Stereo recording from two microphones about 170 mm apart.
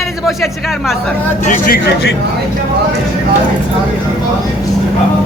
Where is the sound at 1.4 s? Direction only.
50° left (ahead or behind).